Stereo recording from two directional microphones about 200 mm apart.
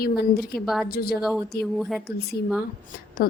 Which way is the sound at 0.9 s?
50° left (ahead or behind).